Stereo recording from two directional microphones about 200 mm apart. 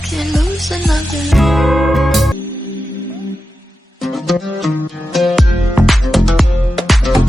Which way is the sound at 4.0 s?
Centre (ahead or behind).